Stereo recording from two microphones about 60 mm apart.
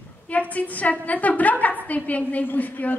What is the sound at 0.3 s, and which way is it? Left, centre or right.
A woman's voice, left.